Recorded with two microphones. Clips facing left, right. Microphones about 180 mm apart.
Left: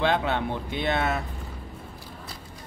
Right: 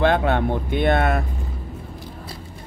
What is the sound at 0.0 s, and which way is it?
Speech, 55° right (ahead or behind).